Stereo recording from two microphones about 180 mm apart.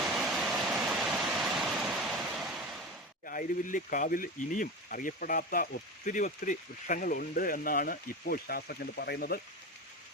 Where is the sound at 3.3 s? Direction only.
50° left (ahead or behind).